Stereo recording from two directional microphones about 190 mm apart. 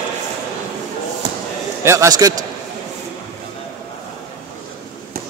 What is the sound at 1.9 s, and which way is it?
Speech, 15° right (ahead or behind).